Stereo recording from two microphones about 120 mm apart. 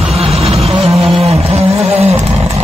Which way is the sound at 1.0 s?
50° right (ahead or behind).